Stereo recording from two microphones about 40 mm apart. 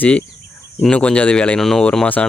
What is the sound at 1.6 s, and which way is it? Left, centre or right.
Speech, centre.